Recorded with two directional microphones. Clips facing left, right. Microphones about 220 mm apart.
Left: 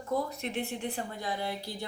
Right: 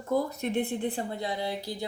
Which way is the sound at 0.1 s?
35° right (ahead or behind).